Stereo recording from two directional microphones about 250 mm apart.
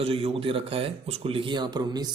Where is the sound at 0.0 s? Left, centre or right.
Right.